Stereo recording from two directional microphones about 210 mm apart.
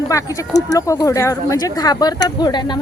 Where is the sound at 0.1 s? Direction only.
15° left (ahead or behind).